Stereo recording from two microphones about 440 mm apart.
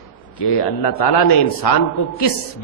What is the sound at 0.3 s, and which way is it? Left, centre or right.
A man's voice, left.